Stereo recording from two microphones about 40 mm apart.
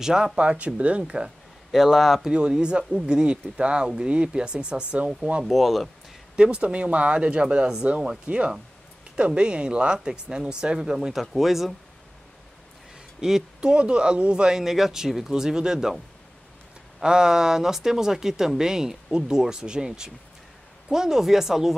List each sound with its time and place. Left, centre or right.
0.0 s speech: centre
0.4 s speech: right
1.7 s speech: centre
2.3 s speech: right
5.4 s speech: centre
6.3 s speech: right; by 11.7 s centre
13.2 s speech: centre
13.6 s speech: right
14.6 s speech: centre
17.0 s speech: centre
20.9 s speech: centre